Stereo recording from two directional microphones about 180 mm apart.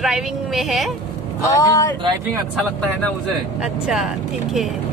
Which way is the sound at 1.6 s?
20° left (ahead or behind).